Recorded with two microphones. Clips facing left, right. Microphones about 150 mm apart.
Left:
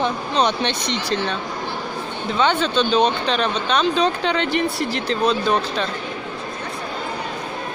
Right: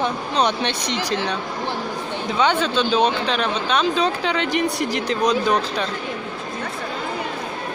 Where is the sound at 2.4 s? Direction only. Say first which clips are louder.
Left 1 dB; 10° right (ahead or behind).